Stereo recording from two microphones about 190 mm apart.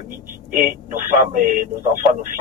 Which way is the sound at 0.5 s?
45° right (ahead or behind).